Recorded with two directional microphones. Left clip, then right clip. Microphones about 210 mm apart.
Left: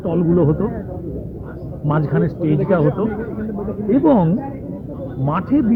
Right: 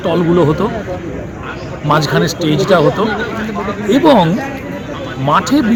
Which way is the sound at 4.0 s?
5° right (ahead or behind).